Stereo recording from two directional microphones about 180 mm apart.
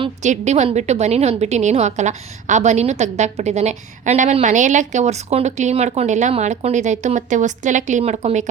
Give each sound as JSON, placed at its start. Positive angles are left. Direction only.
{"t": 0.2, "sound": "a woman's voice", "side_deg": -40}